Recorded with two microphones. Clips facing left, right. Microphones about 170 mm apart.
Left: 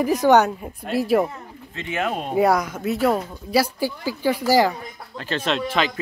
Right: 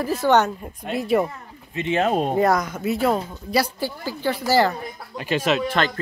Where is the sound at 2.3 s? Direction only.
10° left (ahead or behind).